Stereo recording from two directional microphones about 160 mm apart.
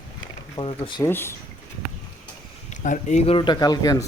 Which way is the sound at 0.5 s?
30° left (ahead or behind).